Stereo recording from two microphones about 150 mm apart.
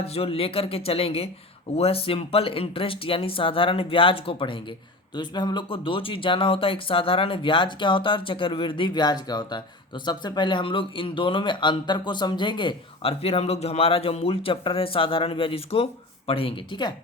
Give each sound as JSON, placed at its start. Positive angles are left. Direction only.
{"t": 0.0, "sound": "speech", "side_deg": 40}